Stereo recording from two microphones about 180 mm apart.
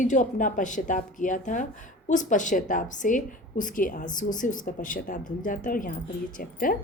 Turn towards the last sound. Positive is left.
turn(degrees=50)  # may be behind; listen again after turning